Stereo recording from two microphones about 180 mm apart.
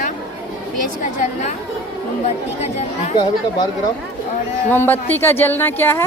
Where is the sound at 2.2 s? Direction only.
40° left (ahead or behind).